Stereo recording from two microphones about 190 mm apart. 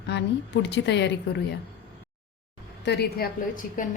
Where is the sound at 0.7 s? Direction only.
65° left (ahead or behind).